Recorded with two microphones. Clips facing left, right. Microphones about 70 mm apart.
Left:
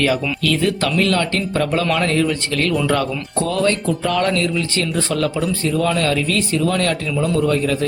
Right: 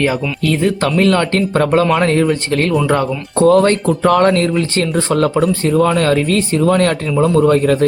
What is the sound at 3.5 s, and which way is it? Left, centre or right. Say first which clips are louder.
Speech: right 7 dB; right.